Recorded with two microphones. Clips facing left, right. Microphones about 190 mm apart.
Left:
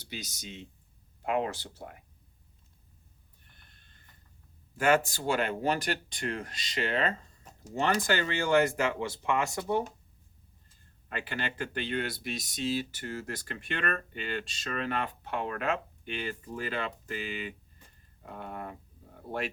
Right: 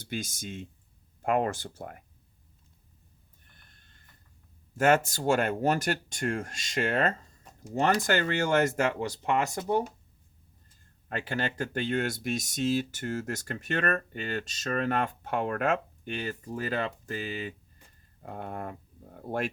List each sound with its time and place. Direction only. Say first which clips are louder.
0.0 s speech: right 7 dB; 50° right (ahead or behind)
4.8 s speech: right 2 dB; 45° right (ahead or behind)
11.1 s speech: right 4 dB; 45° right (ahead or behind)